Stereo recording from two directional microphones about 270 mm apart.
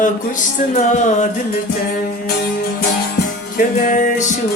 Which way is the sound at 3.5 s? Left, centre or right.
Left.